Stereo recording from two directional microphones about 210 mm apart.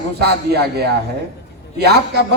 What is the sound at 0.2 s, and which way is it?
A man's voice, 50° right (ahead or behind).